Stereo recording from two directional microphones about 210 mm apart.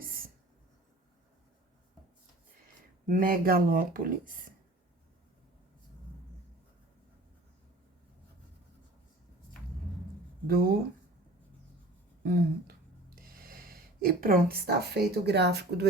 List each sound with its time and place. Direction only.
3.1 s speech: 40° right (ahead or behind)
10.4 s speech: 45° right (ahead or behind)
12.2 s speech: 45° right (ahead or behind)